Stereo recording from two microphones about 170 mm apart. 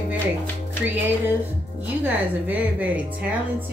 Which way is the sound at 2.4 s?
10° right (ahead or behind).